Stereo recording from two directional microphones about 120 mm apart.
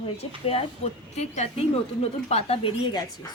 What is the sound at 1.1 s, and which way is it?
Speech, 65° left (ahead or behind).